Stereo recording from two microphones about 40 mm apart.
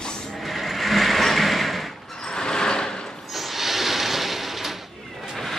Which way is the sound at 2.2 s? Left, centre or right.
Centre.